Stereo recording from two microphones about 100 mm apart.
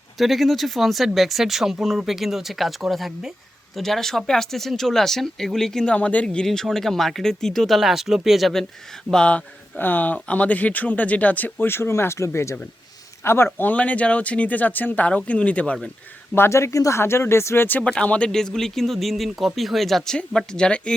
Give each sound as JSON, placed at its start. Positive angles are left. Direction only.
{"t": 0.2, "sound": "speech", "side_deg": 0}
{"t": 16.3, "sound": "speech", "side_deg": 25}